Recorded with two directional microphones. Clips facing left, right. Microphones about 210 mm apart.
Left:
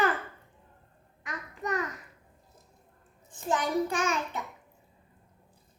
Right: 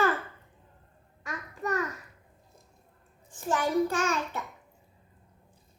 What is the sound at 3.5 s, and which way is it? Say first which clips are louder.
Child singing: right 2 dB; 20° left (ahead or behind).